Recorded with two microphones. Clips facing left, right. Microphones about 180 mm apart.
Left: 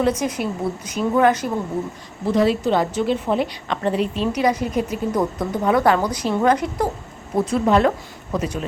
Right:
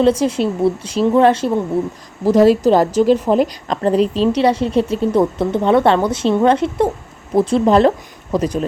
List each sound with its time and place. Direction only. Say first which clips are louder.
0.0 s speech: right 6 dB; 30° right (ahead or behind)
2.2 s a woman's voice: right 7 dB; 40° right (ahead or behind)